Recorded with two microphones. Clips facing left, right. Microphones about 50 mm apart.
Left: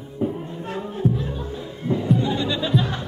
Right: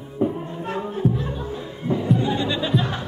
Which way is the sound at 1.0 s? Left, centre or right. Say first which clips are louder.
Even; centre.